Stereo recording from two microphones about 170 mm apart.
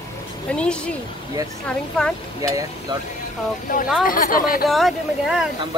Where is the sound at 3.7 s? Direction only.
50° left (ahead or behind).